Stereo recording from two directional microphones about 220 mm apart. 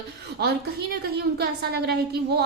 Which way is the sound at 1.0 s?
45° right (ahead or behind).